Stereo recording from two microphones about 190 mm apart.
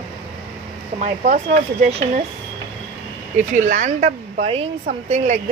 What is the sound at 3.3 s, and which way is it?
Speech, 40° right (ahead or behind).